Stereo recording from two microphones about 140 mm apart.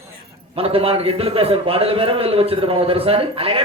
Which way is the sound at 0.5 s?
45° right (ahead or behind).